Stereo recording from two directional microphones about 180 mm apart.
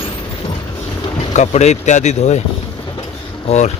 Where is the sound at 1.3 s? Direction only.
40° left (ahead or behind).